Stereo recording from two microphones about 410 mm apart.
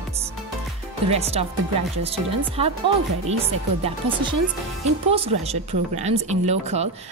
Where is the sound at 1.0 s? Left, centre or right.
Centre.